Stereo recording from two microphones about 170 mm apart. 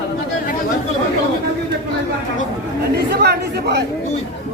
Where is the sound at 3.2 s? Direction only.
75° right (ahead or behind).